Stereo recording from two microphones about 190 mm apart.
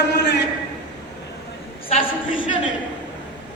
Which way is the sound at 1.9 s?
30° left (ahead or behind).